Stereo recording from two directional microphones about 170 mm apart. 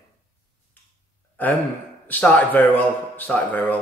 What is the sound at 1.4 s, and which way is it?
Speech, 10° left (ahead or behind).